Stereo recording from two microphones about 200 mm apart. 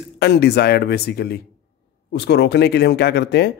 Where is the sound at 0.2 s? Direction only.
55° left (ahead or behind).